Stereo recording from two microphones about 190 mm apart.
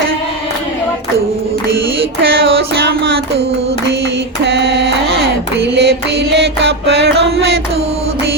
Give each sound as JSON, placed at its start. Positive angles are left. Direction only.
{"t": 2.2, "sound": "music", "side_deg": -55}
{"t": 5.7, "sound": "music", "side_deg": -60}